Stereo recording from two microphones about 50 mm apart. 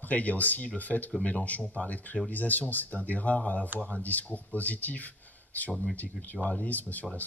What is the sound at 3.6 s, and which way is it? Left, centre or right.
Speech, right.